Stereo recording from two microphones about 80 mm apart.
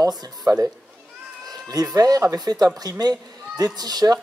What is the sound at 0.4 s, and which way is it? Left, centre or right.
Speech, right.